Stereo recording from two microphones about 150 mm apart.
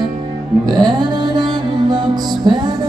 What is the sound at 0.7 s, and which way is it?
Music, 30° right (ahead or behind).